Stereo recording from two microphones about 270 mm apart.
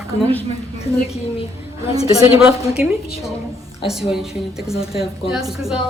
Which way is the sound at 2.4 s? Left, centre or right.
Centre.